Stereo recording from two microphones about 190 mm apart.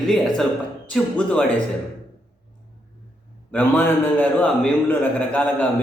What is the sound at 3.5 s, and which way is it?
A man's voice, 10° left (ahead or behind).